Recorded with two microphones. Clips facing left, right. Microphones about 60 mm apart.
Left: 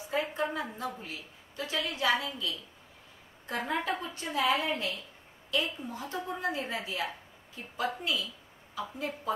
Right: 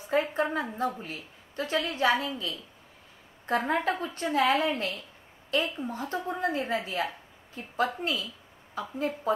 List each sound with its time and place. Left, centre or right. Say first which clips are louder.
0.1 s a woman's voice: right 5 dB; right